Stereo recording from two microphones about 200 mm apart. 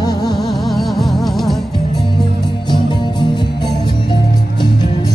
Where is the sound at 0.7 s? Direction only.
Centre (ahead or behind).